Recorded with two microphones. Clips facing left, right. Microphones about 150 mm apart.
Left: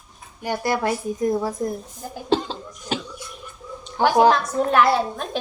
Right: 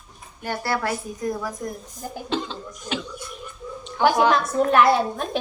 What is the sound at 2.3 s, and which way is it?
Cough, 35° left (ahead or behind).